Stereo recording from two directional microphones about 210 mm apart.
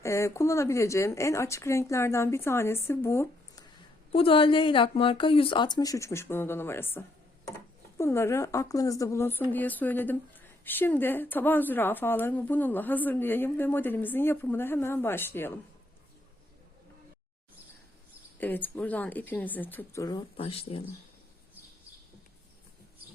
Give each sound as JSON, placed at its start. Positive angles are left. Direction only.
{"t": 0.0, "sound": "a woman's voice", "side_deg": 15}
{"t": 4.1, "sound": "a woman's voice", "side_deg": 25}
{"t": 18.3, "sound": "a woman's voice", "side_deg": 10}